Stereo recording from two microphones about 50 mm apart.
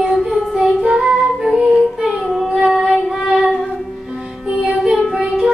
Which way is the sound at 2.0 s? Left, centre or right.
Centre.